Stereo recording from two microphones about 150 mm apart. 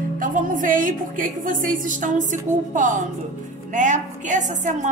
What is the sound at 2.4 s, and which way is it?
A woman's voice, 55° right (ahead or behind).